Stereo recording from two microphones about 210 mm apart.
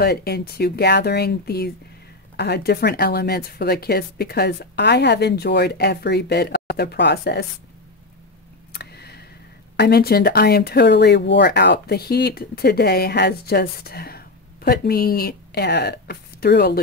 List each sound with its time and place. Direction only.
0.0 s speech: 50° left (ahead or behind)
8.7 s a sound: 50° left (ahead or behind)
9.8 s speech: 50° left (ahead or behind)